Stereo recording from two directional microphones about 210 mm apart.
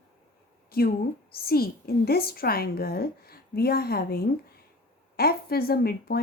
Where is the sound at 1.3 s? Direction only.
45° left (ahead or behind).